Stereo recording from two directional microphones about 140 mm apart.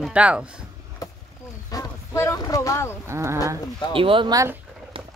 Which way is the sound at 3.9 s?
40° right (ahead or behind).